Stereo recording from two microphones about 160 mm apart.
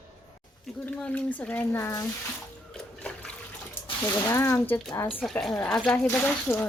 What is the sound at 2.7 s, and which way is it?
Water, 5° left (ahead or behind).